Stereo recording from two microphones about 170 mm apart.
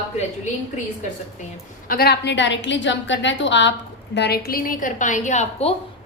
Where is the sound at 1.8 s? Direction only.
60° left (ahead or behind); by 3.7 s 90° left.